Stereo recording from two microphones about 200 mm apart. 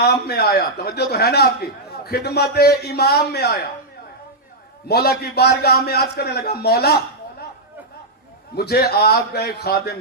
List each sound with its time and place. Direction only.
0.0 s a man's voice: 55° left (ahead or behind)
4.9 s a man's voice: 50° left (ahead or behind)
8.5 s a man's voice: 55° left (ahead or behind)